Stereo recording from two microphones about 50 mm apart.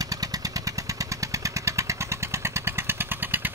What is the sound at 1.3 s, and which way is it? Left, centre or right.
Motorcycle, right.